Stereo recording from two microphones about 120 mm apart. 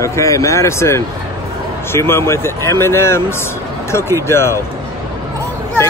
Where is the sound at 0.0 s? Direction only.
25° left (ahead or behind).